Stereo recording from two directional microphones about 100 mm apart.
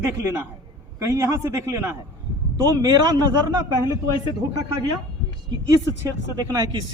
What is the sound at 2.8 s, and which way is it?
Speech, 45° right (ahead or behind).